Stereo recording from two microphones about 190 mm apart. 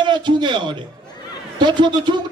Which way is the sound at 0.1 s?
25° right (ahead or behind).